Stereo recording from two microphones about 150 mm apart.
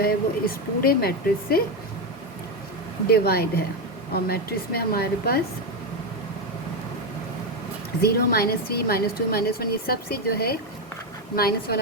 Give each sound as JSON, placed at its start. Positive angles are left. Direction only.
{"t": 0.0, "sound": "speech", "side_deg": 85}
{"t": 3.1, "sound": "a woman's voice", "side_deg": 90}
{"t": 8.0, "sound": "a woman's voice", "side_deg": 90}